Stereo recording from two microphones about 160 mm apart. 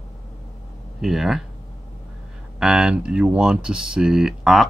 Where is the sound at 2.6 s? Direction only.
5° right (ahead or behind).